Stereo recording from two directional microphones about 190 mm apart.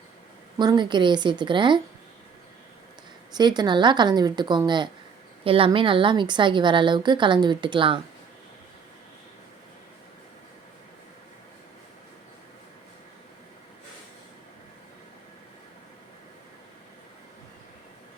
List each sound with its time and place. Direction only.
0.6 s a woman's voice: 25° right (ahead or behind)
3.3 s a woman's voice: 20° right (ahead or behind)